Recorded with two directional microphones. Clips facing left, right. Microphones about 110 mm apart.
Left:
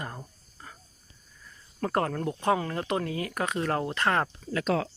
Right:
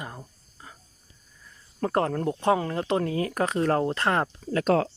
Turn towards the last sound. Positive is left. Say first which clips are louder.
# right 5 dB
turn(degrees=-40)  # may be behind; listen again after turning